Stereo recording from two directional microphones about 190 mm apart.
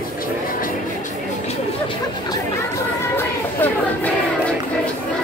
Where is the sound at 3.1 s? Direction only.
10° left (ahead or behind).